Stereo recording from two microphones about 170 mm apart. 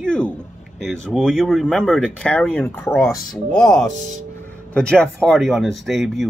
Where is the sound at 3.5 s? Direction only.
5° left (ahead or behind).